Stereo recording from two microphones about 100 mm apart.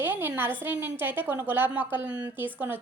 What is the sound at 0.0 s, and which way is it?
A woman's voice, 20° right (ahead or behind).